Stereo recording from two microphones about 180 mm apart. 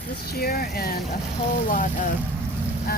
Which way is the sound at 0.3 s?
60° left (ahead or behind).